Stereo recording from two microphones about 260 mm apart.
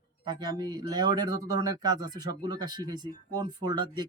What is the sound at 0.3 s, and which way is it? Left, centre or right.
Speech, centre.